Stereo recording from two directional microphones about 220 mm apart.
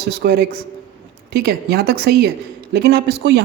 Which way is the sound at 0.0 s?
50° right (ahead or behind).